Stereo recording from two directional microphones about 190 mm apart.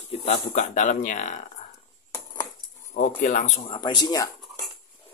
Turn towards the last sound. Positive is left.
turn(degrees=20)  # may be behind; listen again after turning